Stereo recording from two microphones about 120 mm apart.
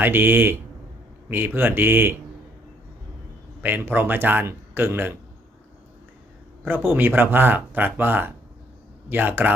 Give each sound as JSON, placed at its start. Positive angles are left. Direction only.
{"t": 0.0, "sound": "speech", "side_deg": -15}
{"t": 3.6, "sound": "speech", "side_deg": -15}
{"t": 6.7, "sound": "speech", "side_deg": -15}